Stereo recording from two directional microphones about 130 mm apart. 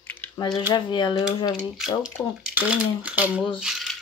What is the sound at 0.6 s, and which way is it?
Speech, 35° left (ahead or behind).